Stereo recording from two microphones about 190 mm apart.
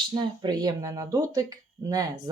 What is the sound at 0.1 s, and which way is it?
Speech, 20° right (ahead or behind).